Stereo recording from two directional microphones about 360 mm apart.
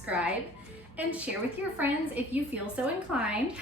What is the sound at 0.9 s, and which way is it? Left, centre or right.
A woman's voice, centre.